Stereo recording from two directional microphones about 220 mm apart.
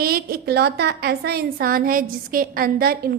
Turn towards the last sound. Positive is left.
turn(degrees=-45)  # may be behind; listen again after turning